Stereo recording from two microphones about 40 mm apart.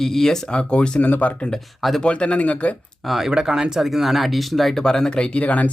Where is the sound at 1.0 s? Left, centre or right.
Left.